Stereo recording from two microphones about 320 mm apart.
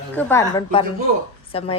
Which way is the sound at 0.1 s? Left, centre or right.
Centre.